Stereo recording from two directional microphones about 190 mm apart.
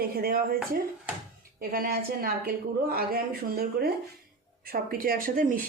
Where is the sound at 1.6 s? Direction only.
50° right (ahead or behind).